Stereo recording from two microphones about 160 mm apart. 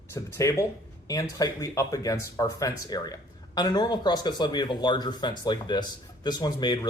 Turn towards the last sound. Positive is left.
turn(degrees=25)  # may be behind; listen again after turning